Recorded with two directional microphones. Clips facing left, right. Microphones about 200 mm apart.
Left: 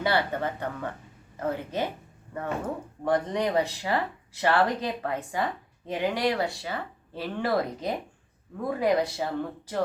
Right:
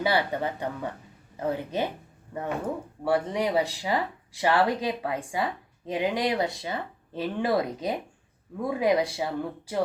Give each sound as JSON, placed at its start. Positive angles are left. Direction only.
{"t": 0.0, "sound": "speech", "side_deg": -15}
{"t": 3.0, "sound": "speech", "side_deg": -10}